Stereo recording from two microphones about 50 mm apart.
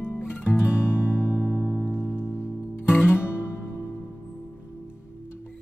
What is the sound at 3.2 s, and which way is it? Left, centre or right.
Music, left.